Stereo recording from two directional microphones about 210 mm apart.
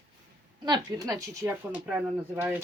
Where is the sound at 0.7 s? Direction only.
20° right (ahead or behind).